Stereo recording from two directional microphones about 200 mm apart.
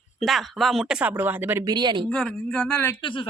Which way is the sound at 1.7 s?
20° right (ahead or behind).